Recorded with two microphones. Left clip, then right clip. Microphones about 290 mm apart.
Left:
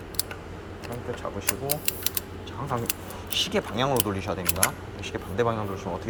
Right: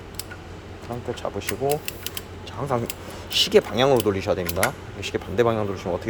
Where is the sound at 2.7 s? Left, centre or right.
Centre.